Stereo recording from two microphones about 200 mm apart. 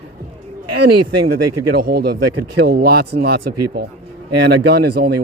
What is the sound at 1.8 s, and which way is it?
A man's voice, 50° right (ahead or behind).